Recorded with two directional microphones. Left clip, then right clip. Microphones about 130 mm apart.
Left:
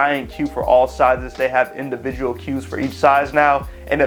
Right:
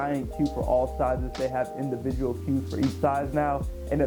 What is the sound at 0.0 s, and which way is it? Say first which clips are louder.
Speech: left 10 dB; 20° left (ahead or behind).